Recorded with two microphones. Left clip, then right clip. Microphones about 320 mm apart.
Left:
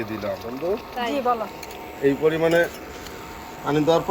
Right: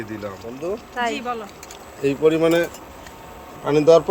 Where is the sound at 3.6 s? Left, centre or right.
Right.